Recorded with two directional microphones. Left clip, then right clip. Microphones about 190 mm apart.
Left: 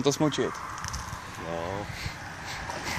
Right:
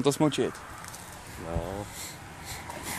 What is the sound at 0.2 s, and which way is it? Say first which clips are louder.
Speech: right 1 dB; 35° right (ahead or behind).